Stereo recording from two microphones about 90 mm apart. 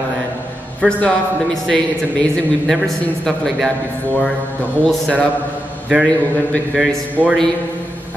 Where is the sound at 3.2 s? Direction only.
5° left (ahead or behind).